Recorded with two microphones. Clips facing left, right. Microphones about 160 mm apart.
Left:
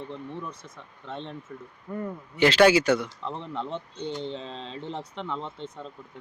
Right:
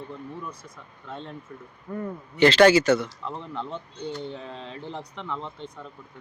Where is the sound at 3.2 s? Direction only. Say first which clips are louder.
Left 1 dB; centre (ahead or behind).